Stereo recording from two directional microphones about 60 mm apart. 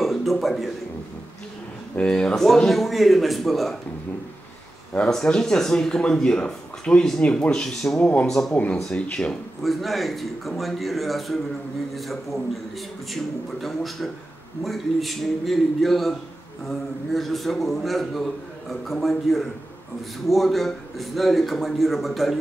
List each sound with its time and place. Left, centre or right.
0.0 s a man's voice: centre
2.0 s a man's voice: centre
5.0 s speech: centre
8.0 s speech: left
8.3 s a man's voice: centre
8.8 s speech: centre
9.6 s a man's voice: centre